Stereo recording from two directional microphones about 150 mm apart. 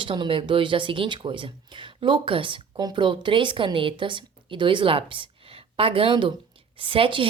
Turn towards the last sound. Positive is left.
turn(degrees=-35)  # may be behind; listen again after turning